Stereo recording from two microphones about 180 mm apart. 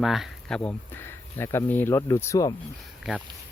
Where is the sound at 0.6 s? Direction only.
10° left (ahead or behind).